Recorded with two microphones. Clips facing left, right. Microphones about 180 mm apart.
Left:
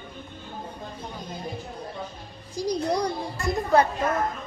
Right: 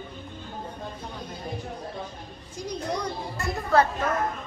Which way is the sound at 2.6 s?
35° left (ahead or behind).